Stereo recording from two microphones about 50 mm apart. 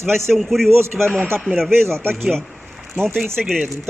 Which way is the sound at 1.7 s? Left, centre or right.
Right.